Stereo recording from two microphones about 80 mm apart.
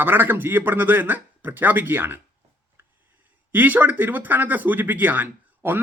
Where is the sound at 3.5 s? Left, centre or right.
Right.